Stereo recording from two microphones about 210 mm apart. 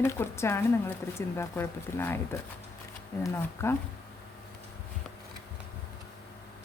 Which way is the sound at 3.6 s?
10° left (ahead or behind).